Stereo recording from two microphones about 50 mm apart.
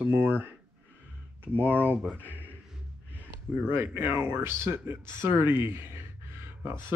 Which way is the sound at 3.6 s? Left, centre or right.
Right.